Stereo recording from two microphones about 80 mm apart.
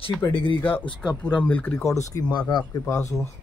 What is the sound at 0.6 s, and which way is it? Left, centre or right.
Speech, left.